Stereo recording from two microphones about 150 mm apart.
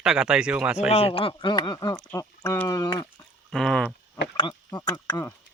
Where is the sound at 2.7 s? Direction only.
25° left (ahead or behind).